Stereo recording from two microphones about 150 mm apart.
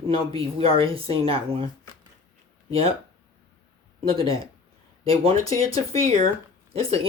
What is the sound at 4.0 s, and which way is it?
Speech, 40° right (ahead or behind).